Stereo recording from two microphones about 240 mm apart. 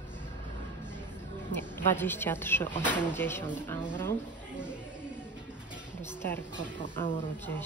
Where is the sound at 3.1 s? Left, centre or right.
Centre.